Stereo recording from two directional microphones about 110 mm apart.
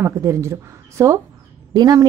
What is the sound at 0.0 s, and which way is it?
A woman's voice, 30° right (ahead or behind).